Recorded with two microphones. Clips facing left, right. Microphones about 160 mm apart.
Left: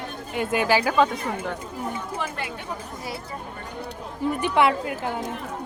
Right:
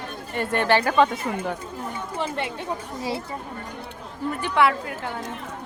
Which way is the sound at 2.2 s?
25° right (ahead or behind).